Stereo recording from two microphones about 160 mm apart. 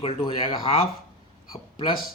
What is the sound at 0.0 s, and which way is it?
Speech, 35° left (ahead or behind).